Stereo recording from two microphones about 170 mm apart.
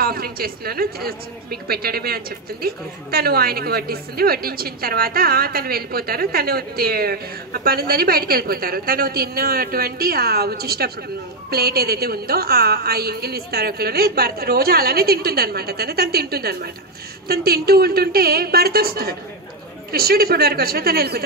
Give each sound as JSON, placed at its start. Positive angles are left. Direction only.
{"t": 0.0, "sound": "speech", "side_deg": -60}